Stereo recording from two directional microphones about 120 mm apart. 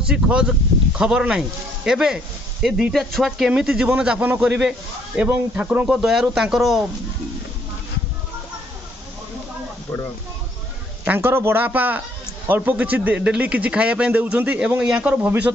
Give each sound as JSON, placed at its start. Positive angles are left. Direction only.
{"t": 0.0, "sound": "a man's voice", "side_deg": -5}
{"t": 11.1, "sound": "a man's voice", "side_deg": -20}